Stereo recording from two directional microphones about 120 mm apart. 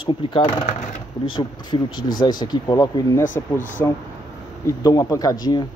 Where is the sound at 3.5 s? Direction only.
90° left.